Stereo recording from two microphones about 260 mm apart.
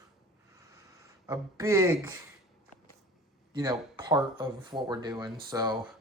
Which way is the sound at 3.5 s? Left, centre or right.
Centre.